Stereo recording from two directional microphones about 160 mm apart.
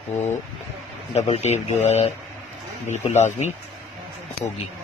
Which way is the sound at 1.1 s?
40° left (ahead or behind).